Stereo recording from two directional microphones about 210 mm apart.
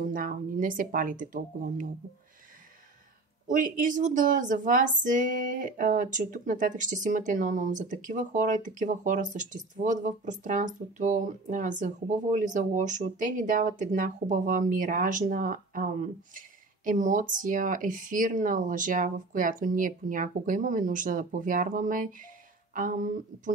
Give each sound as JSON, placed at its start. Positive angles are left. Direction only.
{"t": 0.0, "sound": "speech", "side_deg": -40}
{"t": 3.4, "sound": "speech", "side_deg": -40}